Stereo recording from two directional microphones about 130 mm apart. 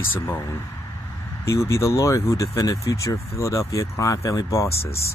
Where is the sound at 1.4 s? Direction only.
20° left (ahead or behind).